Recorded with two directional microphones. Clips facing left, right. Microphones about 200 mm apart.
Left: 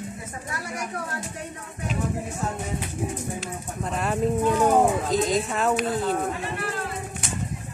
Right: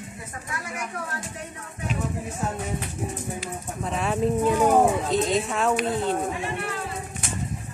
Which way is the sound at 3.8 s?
Centre (ahead or behind).